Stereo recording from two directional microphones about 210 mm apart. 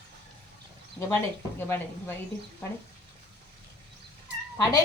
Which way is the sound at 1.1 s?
10° left (ahead or behind).